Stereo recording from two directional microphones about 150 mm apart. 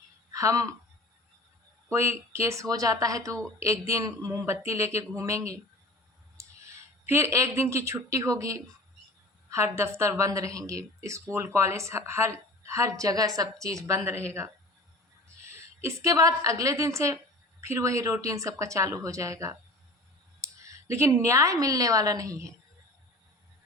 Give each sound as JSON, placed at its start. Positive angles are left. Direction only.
{"t": 0.3, "sound": "speech", "side_deg": -20}
{"t": 1.9, "sound": "a woman's voice", "side_deg": -15}
{"t": 20.4, "sound": "clicking", "side_deg": -20}
{"t": 20.9, "sound": "a woman's voice", "side_deg": -20}